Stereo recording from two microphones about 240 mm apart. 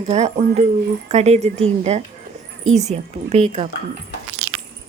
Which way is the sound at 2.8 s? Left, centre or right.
Right.